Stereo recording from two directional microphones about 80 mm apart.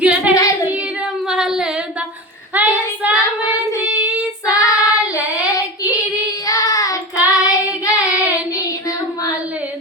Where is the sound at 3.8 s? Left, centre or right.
Centre.